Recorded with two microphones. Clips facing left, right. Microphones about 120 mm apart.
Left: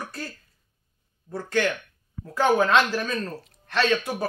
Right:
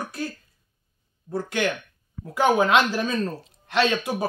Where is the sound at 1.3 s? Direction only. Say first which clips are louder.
Even; 15° right (ahead or behind).